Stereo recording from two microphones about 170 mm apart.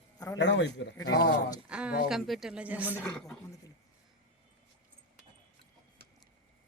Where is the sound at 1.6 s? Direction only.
5° right (ahead or behind).